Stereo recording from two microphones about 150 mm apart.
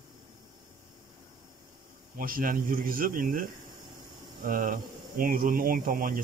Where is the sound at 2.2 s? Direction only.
70° right (ahead or behind).